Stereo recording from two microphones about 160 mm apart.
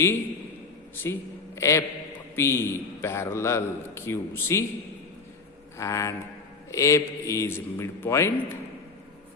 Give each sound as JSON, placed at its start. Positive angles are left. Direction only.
{"t": 1.0, "sound": "a man's voice", "side_deg": 15}
{"t": 5.7, "sound": "a man's voice", "side_deg": 20}